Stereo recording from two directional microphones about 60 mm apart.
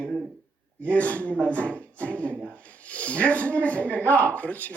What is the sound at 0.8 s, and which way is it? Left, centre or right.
Speech, left.